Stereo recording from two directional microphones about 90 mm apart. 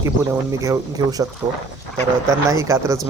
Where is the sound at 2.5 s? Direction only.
35° right (ahead or behind).